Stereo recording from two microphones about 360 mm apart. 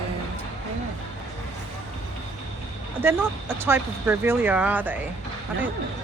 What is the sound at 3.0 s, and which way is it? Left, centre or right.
Speech, centre.